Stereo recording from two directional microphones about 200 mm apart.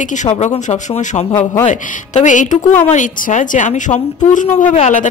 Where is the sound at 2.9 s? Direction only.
40° left (ahead or behind).